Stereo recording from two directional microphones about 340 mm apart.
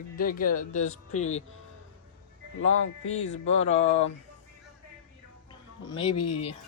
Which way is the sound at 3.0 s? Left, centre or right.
Left.